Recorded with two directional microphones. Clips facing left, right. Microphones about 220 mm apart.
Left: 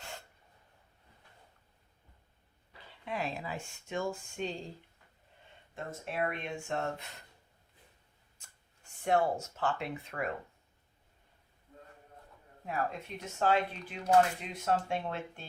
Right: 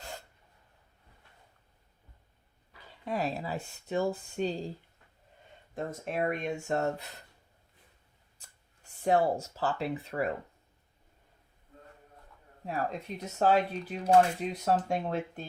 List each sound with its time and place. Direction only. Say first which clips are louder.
3.0 s speech: right 4 dB; 40° right (ahead or behind)
6.1 s speech: right 4 dB; 45° right (ahead or behind)
9.0 s speech: right 3 dB; 35° right (ahead or behind)
12.6 s speech: right 2 dB; 35° right (ahead or behind)